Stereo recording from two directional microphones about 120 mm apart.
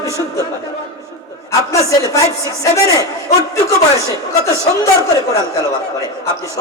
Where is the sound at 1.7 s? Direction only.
25° left (ahead or behind).